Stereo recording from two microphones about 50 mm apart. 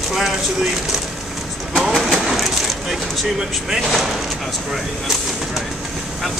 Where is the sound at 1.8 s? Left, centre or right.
Centre.